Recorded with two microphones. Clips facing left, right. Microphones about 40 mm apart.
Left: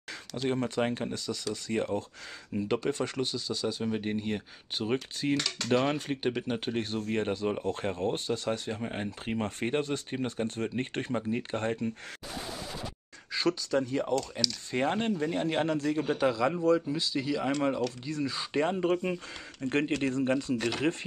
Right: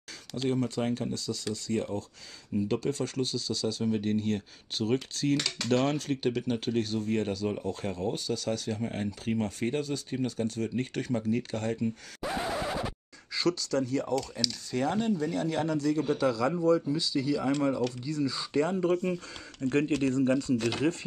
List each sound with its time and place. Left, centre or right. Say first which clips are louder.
0.4 s speech: even; left
9.4 s speech: left 2 dB; left
12.5 s scratch: right 8 dB; right
13.3 s speech: even; left